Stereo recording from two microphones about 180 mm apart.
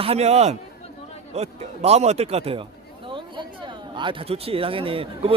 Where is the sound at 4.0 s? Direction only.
30° right (ahead or behind).